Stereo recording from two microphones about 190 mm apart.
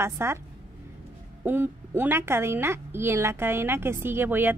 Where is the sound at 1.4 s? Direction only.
10° right (ahead or behind).